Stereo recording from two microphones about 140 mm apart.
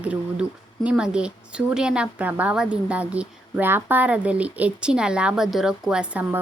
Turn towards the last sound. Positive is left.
turn(degrees=-10)  # may be behind; listen again after turning